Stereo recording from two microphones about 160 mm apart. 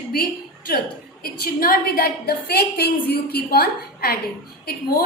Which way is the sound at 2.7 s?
85° left.